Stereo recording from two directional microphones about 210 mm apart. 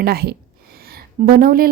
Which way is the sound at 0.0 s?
50° right (ahead or behind).